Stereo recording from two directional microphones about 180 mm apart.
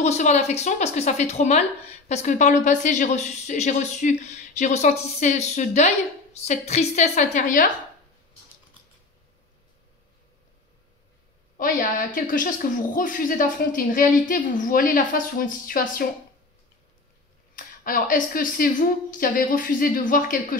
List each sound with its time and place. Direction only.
0.0 s speech: 40° left (ahead or behind)
11.5 s a woman's voice: 50° left (ahead or behind)
17.6 s a woman's voice: 50° left (ahead or behind)